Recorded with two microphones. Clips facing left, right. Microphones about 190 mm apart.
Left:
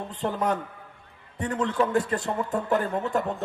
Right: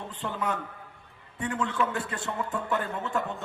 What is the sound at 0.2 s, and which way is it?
A man's voice, 40° left (ahead or behind).